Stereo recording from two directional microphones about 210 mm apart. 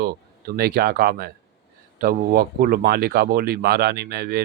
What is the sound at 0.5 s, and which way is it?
Speech, 50° right (ahead or behind).